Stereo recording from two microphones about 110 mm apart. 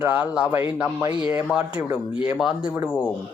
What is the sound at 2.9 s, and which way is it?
Speech, 15° left (ahead or behind).